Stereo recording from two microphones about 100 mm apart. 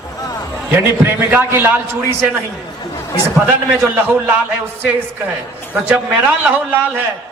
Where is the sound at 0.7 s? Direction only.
20° right (ahead or behind).